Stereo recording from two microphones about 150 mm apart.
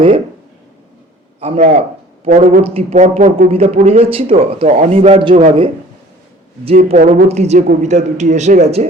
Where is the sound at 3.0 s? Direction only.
55° right (ahead or behind).